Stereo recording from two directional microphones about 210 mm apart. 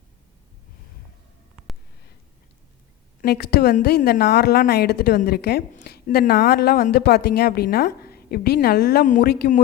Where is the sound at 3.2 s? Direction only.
50° left (ahead or behind).